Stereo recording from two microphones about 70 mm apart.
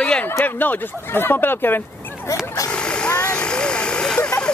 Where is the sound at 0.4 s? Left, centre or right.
Left.